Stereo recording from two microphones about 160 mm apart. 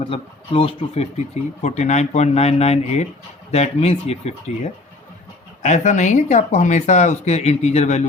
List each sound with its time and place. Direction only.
0.0 s speech: 35° left (ahead or behind)
5.6 s speech: 50° left (ahead or behind)